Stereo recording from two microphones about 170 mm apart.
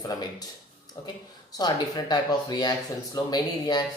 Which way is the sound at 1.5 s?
25° left (ahead or behind).